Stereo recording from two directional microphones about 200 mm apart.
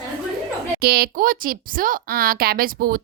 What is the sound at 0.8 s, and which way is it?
A woman's voice, 50° right (ahead or behind).